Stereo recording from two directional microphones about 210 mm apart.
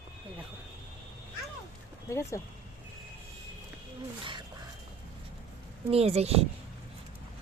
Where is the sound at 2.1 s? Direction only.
15° left (ahead or behind).